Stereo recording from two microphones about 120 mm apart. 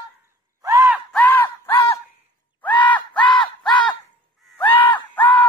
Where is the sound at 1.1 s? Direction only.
15° left (ahead or behind).